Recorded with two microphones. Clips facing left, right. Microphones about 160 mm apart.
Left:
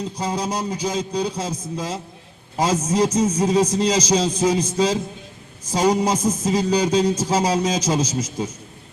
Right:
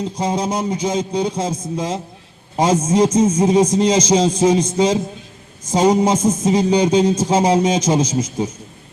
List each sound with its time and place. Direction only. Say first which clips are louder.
0.0 s a man's voice: right 4 dB; 25° right (ahead or behind)